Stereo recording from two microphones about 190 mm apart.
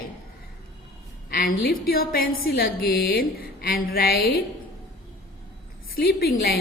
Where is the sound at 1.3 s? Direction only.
50° left (ahead or behind).